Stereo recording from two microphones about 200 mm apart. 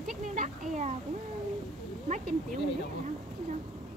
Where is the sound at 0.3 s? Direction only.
35° right (ahead or behind).